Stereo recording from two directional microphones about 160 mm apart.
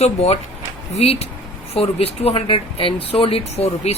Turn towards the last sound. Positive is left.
turn(degrees=40)  # may be behind; listen again after turning